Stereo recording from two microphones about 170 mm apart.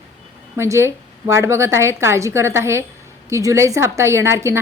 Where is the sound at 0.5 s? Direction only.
15° right (ahead or behind).